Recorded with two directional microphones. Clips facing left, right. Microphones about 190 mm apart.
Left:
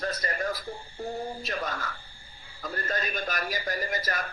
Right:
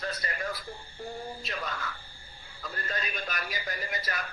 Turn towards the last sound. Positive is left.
turn(degrees=45)  # may be behind; listen again after turning